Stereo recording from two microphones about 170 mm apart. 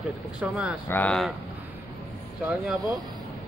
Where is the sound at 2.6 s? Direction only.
10° right (ahead or behind).